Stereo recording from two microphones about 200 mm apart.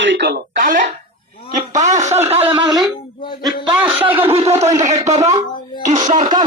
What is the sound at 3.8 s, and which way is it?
Speech, 5° right (ahead or behind).